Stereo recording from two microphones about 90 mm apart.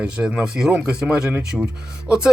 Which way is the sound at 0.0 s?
10° right (ahead or behind).